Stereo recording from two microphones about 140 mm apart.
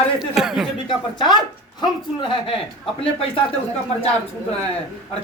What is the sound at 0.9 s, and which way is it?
A man's voice, 30° left (ahead or behind).